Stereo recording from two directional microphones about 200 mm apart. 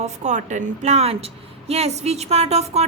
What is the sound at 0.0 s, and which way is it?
Speech, 35° right (ahead or behind).